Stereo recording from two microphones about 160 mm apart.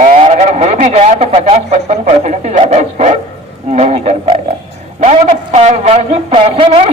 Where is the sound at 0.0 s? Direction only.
45° right (ahead or behind).